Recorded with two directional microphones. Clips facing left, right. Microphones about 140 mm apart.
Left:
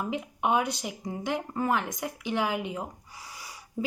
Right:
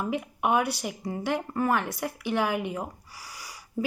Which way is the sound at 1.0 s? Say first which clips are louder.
Right 2 dB; 15° left (ahead or behind).